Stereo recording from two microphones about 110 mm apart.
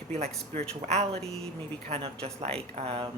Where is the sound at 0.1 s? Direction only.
75° right (ahead or behind).